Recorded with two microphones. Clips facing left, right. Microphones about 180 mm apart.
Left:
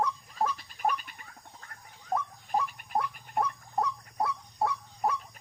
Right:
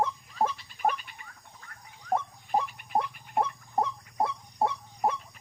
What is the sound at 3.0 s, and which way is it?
Chicken, 25° right (ahead or behind).